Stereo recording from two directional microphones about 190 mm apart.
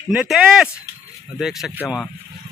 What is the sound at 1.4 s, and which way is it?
Speech, centre (ahead or behind).